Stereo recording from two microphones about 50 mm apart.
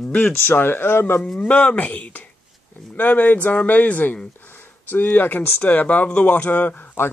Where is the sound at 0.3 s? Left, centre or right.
Left.